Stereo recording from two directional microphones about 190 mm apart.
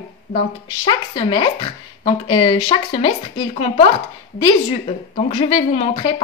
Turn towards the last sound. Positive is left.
turn(degrees=30)  # may be behind; listen again after turning